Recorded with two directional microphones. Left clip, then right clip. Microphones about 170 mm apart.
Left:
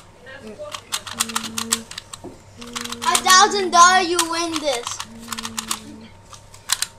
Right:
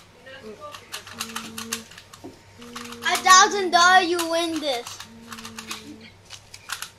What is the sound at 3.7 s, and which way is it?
A woman's voice, 25° right (ahead or behind).